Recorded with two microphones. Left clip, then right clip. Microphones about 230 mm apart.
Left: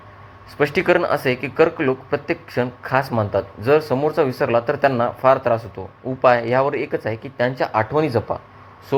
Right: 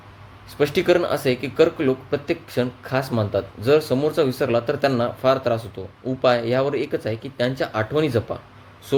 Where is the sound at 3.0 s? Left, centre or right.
Centre.